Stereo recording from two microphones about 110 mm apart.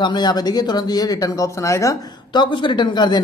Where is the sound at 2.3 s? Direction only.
45° left (ahead or behind).